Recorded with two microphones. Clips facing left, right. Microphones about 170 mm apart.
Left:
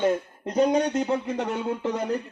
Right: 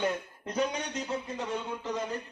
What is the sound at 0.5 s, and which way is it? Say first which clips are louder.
Speech: left 10 dB; 55° left (ahead or behind).